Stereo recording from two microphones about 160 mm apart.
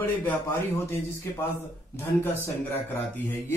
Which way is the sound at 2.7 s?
15° left (ahead or behind).